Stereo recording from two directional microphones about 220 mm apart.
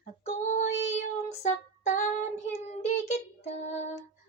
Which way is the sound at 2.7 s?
30° left (ahead or behind).